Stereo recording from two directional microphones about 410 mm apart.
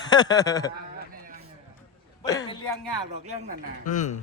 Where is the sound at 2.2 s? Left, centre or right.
Centre.